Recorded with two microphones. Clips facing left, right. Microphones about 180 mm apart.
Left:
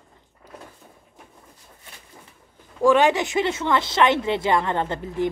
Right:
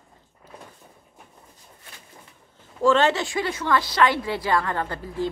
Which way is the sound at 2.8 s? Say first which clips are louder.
Left 2 dB; 15° left (ahead or behind).